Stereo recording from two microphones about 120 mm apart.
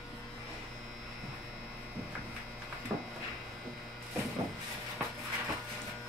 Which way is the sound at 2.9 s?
25° right (ahead or behind).